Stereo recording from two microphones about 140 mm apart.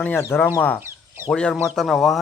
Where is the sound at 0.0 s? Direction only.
15° left (ahead or behind).